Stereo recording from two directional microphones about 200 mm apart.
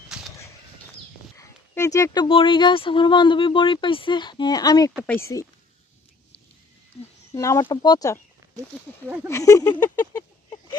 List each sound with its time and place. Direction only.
0.1 s a sound: 5° right (ahead or behind)
1.4 s speech: 15° left (ahead or behind)
7.0 s a sound: 30° left (ahead or behind)
7.3 s speech: 15° left (ahead or behind)
9.0 s speech: 10° right (ahead or behind)
9.3 s speech: 15° left (ahead or behind)